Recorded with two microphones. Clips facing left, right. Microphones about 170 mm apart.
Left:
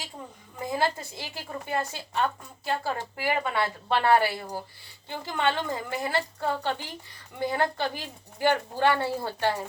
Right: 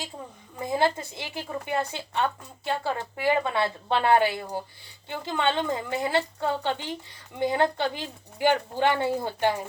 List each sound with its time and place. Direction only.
0.6 s a woman's voice: 20° right (ahead or behind)